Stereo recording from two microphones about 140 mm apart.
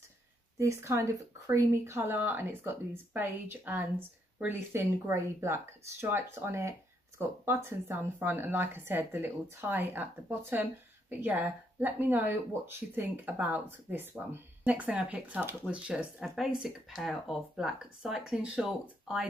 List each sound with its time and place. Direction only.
0.6 s speech: 20° right (ahead or behind); by 19.2 s 5° right (ahead or behind)